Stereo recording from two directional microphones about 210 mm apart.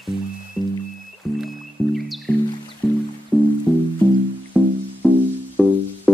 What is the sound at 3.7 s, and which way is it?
Music, 5° right (ahead or behind).